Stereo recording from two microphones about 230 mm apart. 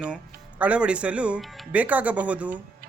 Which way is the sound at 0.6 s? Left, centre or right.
Centre.